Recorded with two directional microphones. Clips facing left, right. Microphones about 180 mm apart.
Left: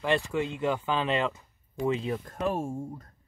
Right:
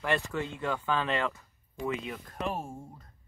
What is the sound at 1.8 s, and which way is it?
Speech, 30° left (ahead or behind).